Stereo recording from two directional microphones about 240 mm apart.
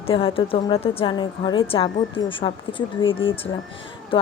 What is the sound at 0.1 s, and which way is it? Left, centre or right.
Speech, left.